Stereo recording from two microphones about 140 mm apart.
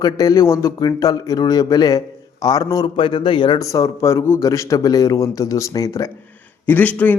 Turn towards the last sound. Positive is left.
turn(degrees=10)  # may be behind; listen again after turning